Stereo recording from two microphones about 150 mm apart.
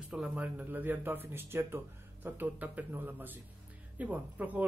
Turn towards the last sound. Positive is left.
turn(degrees=-10)  # may be behind; listen again after turning